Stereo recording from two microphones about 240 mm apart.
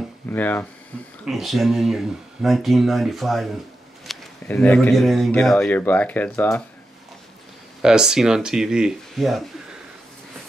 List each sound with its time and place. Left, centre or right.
0.3 s speech: centre
7.8 s speech: centre